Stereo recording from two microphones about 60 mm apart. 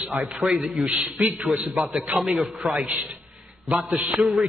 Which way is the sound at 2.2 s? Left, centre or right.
Centre.